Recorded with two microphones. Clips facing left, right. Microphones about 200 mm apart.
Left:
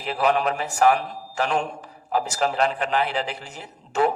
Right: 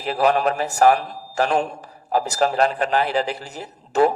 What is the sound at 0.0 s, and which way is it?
A man's voice, 35° right (ahead or behind).